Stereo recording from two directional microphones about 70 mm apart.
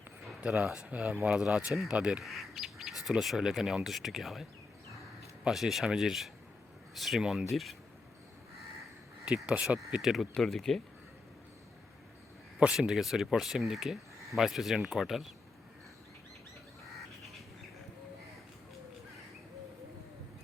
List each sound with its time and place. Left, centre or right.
0.4 s speech: centre
2.2 s speech: centre
9.2 s speech: centre
12.5 s speech: centre